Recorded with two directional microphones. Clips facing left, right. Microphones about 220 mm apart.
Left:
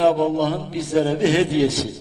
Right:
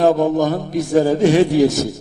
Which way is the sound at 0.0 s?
45° right (ahead or behind).